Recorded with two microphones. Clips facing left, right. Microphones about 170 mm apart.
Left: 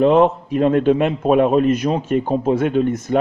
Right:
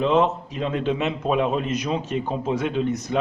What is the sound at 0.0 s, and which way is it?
A man's voice, 55° left (ahead or behind).